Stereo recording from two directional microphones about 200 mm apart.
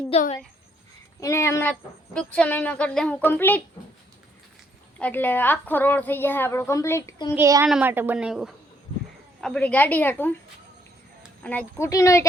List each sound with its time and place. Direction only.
0.1 s speech: 35° left (ahead or behind)
1.2 s a woman's voice: 15° left (ahead or behind)
4.9 s a woman's voice: 10° left (ahead or behind)
7.3 s a woman's voice: 15° right (ahead or behind); by 10.3 s 10° left (ahead or behind)
11.4 s a woman's voice: 10° left (ahead or behind)